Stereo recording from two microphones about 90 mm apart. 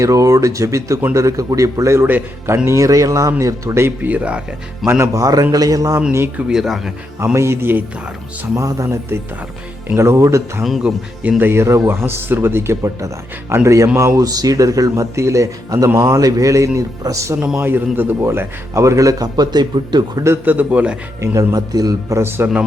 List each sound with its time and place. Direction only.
0.0 s a man's voice: 40° right (ahead or behind)
2.0 s speech: 20° right (ahead or behind)
2.6 s a man's voice: 35° right (ahead or behind); by 4.4 s 15° right (ahead or behind)
5.1 s a man's voice: 40° right (ahead or behind)
6.5 s speech: 5° right (ahead or behind)
7.3 s speech: 30° right (ahead or behind)
8.5 s a man's voice: 40° right (ahead or behind)
10.6 s speech: centre (ahead or behind)
11.2 s a man's voice: 20° right (ahead or behind); by 17.3 s 35° right (ahead or behind)
17.6 s a man's voice: 25° right (ahead or behind); by 20.2 s 55° right (ahead or behind)
20.2 s speech: 25° right (ahead or behind)
21.2 s speech: 40° right (ahead or behind)
22.2 s speech: 25° right (ahead or behind)